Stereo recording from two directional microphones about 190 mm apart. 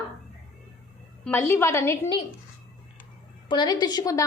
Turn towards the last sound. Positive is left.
turn(degrees=20)  # may be behind; listen again after turning